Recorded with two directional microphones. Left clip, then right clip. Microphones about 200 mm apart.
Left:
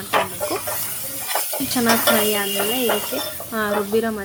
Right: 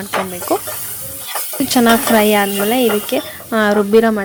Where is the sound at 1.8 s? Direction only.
40° right (ahead or behind).